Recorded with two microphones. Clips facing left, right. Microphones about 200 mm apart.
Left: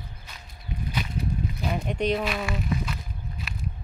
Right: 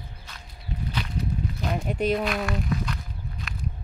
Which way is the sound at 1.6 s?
5° left (ahead or behind).